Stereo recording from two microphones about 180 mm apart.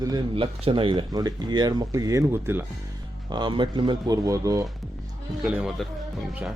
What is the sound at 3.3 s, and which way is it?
Speech, 25° right (ahead or behind).